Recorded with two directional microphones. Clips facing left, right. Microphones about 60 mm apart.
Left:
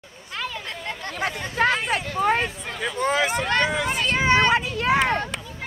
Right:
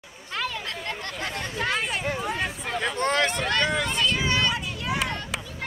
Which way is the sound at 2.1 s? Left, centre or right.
Left.